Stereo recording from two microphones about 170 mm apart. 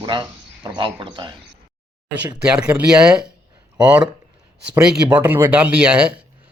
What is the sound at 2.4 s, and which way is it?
Speech, 5° right (ahead or behind).